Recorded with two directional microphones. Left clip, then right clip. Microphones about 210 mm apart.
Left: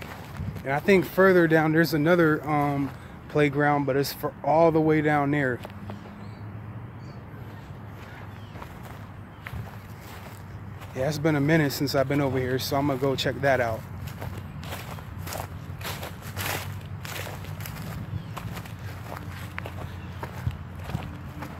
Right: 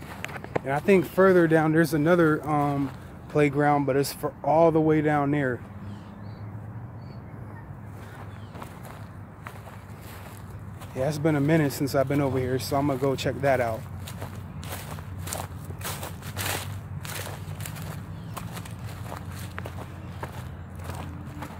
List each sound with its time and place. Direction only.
0.7 s speech: 5° right (ahead or behind)
11.0 s speech: centre (ahead or behind)
15.8 s a sound: 15° right (ahead or behind)
16.3 s walk: 5° right (ahead or behind)
19.0 s walk: centre (ahead or behind)